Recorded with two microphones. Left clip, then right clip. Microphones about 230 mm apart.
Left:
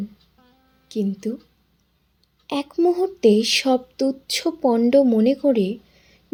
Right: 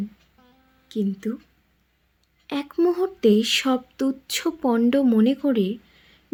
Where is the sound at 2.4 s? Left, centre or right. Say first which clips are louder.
Left 2 dB; centre.